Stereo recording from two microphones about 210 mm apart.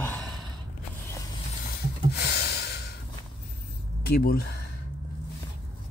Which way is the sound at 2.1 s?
50° left (ahead or behind).